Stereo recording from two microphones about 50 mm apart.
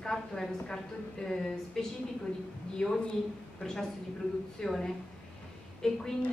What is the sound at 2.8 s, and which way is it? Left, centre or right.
Music, centre.